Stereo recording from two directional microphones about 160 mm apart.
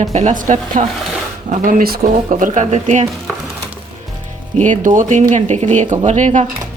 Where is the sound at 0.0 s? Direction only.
45° right (ahead or behind).